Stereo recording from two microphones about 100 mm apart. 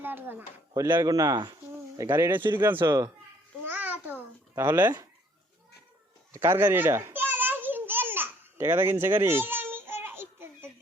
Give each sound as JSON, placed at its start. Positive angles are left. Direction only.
{"t": 0.0, "sound": "speech", "side_deg": -20}
{"t": 0.9, "sound": "a man's voice", "side_deg": -40}
{"t": 2.0, "sound": "speech", "side_deg": -20}
{"t": 2.8, "sound": "a man's voice", "side_deg": -35}
{"t": 3.6, "sound": "babbling", "side_deg": -20}
{"t": 4.5, "sound": "speech", "side_deg": -25}
{"t": 6.3, "sound": "a sound", "side_deg": -25}